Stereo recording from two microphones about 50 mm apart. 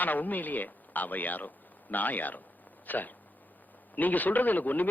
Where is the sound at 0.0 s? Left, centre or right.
Left.